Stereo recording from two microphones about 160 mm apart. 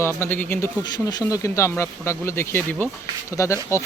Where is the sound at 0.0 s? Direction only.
15° left (ahead or behind).